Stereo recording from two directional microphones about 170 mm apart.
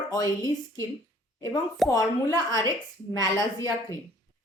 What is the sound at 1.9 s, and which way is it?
A woman's voice, 20° left (ahead or behind).